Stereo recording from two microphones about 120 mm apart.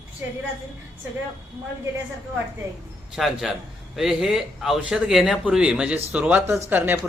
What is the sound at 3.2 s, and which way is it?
A man's voice, 5° right (ahead or behind).